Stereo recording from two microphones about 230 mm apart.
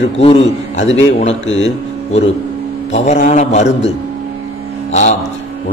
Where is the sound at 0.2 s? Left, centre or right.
Left.